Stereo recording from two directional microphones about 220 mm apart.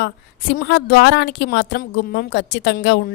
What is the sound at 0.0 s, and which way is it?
A woman's voice, 50° left (ahead or behind).